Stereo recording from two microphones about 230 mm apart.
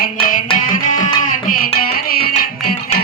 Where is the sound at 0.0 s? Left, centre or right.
Left.